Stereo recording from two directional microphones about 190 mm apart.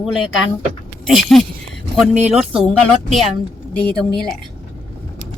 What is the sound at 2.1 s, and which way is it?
Speech, 35° right (ahead or behind).